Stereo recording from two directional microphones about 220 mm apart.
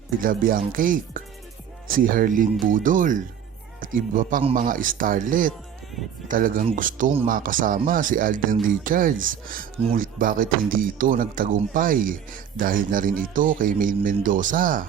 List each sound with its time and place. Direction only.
0.2 s speech: 40° right (ahead or behind)